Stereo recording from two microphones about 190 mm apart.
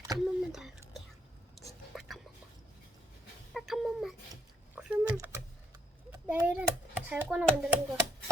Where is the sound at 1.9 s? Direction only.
Centre (ahead or behind).